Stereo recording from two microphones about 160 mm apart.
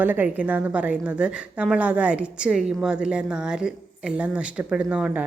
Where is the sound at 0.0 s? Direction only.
10° right (ahead or behind).